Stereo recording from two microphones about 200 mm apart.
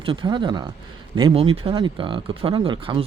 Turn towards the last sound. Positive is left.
turn(degrees=-25)  # may be behind; listen again after turning